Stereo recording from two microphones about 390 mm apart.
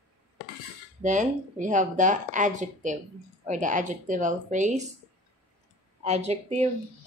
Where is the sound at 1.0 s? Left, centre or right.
Centre.